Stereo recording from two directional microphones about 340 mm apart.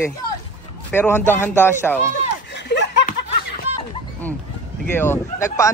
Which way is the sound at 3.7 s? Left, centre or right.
Centre.